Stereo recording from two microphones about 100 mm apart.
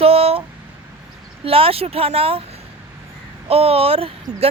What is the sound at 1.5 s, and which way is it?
Speech, 70° right (ahead or behind).